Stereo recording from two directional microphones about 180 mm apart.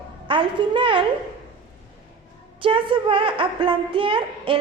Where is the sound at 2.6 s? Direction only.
30° right (ahead or behind).